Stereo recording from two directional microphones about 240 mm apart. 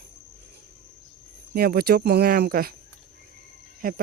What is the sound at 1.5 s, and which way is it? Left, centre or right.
Speech, right.